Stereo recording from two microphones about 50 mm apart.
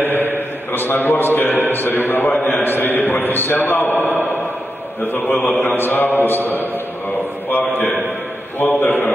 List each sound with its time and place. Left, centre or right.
0.0 s mantra: left
0.7 s a man's voice: left
1.7 s mantra: left
5.0 s a man's voice: left
5.8 s mantra: left
7.4 s a man's voice: left
8.5 s mantra: left